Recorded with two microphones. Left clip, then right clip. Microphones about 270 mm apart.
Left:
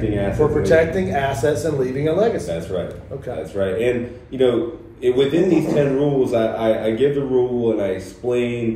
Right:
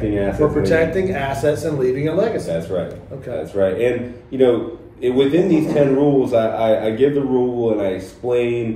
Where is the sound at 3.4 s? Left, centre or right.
Right.